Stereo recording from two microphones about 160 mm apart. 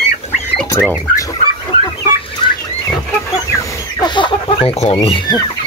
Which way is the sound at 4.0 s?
35° left (ahead or behind).